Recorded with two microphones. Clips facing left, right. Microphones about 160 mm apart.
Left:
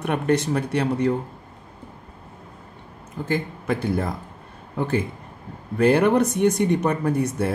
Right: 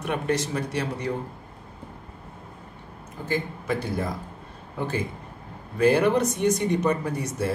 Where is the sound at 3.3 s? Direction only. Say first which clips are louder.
Left 2 dB; 55° left (ahead or behind).